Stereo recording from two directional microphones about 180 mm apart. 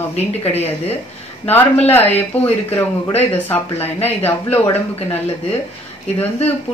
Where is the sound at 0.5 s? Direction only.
35° left (ahead or behind).